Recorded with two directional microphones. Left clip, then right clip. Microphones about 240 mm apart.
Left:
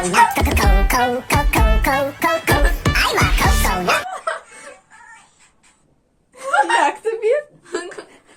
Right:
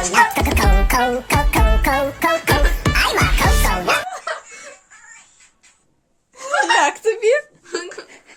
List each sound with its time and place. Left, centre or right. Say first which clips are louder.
0.0 s music: left 1 dB; centre
6.7 s chuckle: right 1 dB; right
7.6 s a sound: even; centre